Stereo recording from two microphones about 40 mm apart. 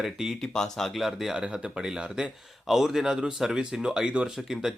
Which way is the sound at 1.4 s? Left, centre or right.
Centre.